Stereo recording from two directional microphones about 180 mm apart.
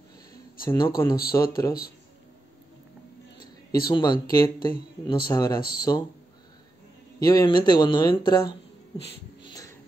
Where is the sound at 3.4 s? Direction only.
25° left (ahead or behind).